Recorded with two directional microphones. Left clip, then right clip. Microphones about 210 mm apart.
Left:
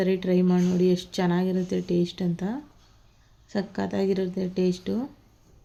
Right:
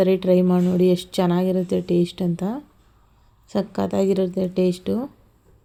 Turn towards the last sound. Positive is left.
turn(degrees=-20)  # may be behind; listen again after turning